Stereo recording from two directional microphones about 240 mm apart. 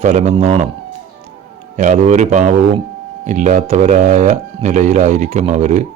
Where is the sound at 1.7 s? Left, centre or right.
Right.